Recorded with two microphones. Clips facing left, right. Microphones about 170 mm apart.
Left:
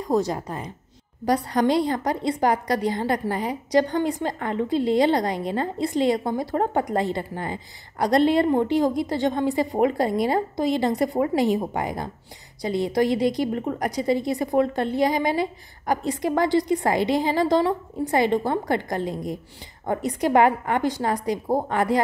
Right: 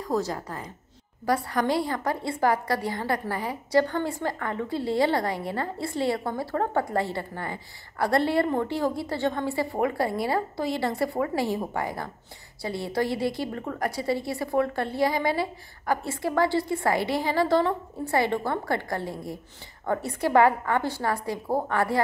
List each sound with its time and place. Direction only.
0.0 s a woman's voice: 20° left (ahead or behind)